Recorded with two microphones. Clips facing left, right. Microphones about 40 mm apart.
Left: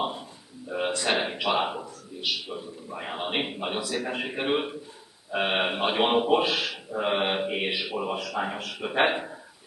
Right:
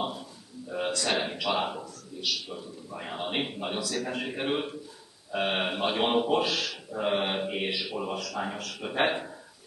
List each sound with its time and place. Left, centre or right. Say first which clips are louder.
0.0 s a man's voice: left 3 dB; left